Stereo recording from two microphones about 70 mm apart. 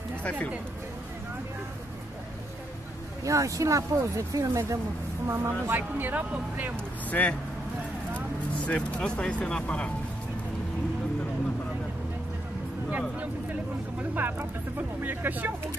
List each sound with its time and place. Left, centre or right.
0.2 s speech: centre
3.3 s speech: right
5.2 s speech: right
7.1 s speech: left
8.6 s speech: centre
14.1 s speech: right